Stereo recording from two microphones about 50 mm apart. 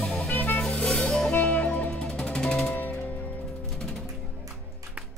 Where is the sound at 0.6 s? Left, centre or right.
Left.